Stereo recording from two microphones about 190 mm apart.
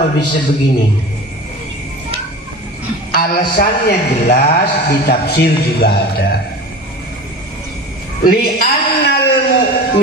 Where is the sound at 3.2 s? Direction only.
50° left (ahead or behind).